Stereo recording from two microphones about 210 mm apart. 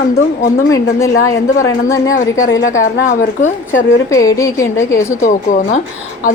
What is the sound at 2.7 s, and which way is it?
Speech, 70° left (ahead or behind).